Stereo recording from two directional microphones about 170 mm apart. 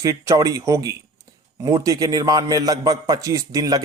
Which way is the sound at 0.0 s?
20° right (ahead or behind).